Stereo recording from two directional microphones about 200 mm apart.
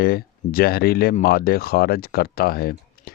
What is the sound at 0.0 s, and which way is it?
Speech, 50° left (ahead or behind).